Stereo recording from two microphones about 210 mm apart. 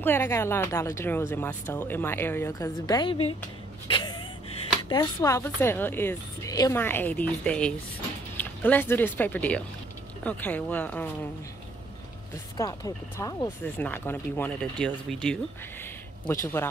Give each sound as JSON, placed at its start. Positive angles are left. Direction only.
{"t": 0.0, "sound": "speech", "side_deg": 10}
{"t": 3.9, "sound": "a sound", "side_deg": 20}
{"t": 4.8, "sound": "speech", "side_deg": 15}
{"t": 12.5, "sound": "speech", "side_deg": 15}
{"t": 16.3, "sound": "speech", "side_deg": 10}